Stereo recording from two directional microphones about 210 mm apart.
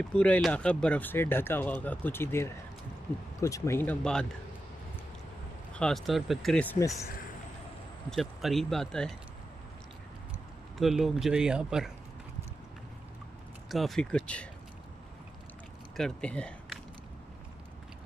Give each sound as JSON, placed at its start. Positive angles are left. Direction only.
{"t": 0.1, "sound": "speech", "side_deg": 5}
{"t": 5.7, "sound": "speech", "side_deg": 5}
{"t": 8.1, "sound": "speech", "side_deg": 0}
{"t": 10.8, "sound": "speech", "side_deg": 0}
{"t": 13.7, "sound": "speech", "side_deg": 0}
{"t": 16.0, "sound": "speech", "side_deg": 5}